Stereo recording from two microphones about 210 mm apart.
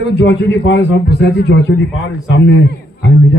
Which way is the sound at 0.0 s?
60° left (ahead or behind).